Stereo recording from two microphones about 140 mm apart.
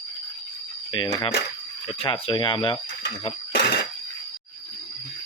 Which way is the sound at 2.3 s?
35° left (ahead or behind).